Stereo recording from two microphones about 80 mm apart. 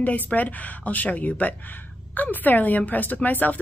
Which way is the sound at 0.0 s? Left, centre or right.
Left.